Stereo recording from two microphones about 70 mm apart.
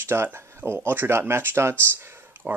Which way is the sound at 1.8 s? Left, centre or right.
Right.